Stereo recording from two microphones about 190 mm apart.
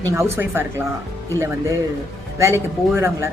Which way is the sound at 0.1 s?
15° right (ahead or behind).